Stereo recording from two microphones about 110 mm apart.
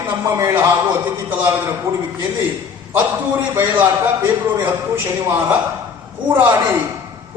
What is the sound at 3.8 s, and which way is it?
A man's voice, 20° right (ahead or behind).